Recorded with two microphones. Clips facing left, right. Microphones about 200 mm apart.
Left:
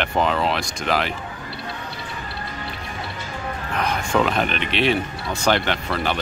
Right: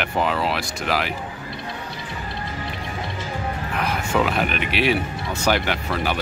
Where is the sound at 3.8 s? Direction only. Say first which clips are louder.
Left 1 dB; 5° right (ahead or behind).